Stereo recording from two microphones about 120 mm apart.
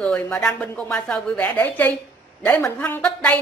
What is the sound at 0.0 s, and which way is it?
A woman's voice, 10° left (ahead or behind).